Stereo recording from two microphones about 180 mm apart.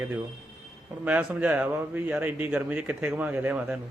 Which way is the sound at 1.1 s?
10° right (ahead or behind).